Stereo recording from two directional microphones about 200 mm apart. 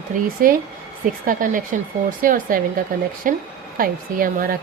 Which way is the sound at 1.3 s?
40° right (ahead or behind).